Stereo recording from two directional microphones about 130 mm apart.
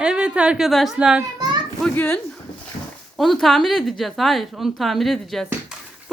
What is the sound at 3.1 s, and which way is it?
A woman's voice, centre (ahead or behind).